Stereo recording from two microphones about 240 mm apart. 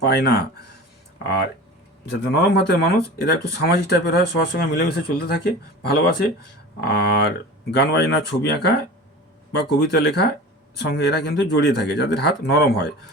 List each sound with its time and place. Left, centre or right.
0.0 s speech: left